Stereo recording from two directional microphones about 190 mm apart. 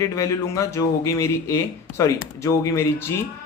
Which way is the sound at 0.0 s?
15° left (ahead or behind).